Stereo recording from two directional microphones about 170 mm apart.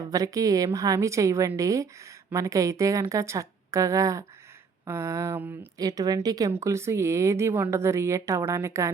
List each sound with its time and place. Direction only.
0.1 s a woman's voice: 20° right (ahead or behind)